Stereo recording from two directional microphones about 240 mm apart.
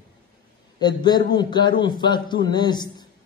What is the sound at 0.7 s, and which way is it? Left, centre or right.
A man's voice, centre.